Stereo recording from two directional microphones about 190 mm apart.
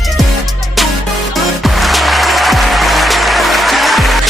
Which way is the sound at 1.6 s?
Centre (ahead or behind).